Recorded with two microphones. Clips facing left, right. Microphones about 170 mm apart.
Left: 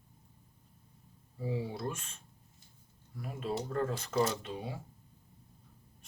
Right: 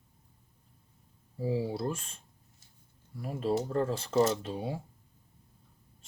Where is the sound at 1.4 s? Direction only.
30° right (ahead or behind).